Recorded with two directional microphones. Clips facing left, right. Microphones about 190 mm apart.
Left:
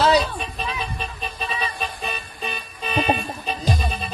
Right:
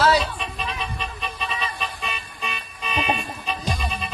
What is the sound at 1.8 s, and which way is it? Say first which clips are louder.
Toot: left 2 dB; 35° left (ahead or behind).